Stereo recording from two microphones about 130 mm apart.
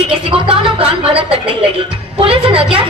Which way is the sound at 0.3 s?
40° right (ahead or behind).